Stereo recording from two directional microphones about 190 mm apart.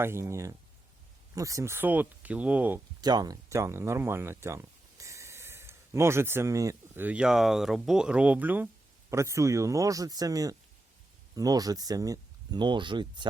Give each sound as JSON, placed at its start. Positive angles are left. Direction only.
{"t": 0.0, "sound": "speech", "side_deg": -15}
{"t": 3.0, "sound": "speech", "side_deg": -20}